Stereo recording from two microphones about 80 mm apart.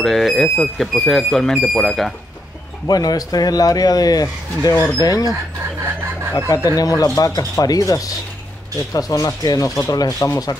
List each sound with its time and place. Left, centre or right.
0.0 s speech: centre
2.9 s speech: left
6.3 s speech: left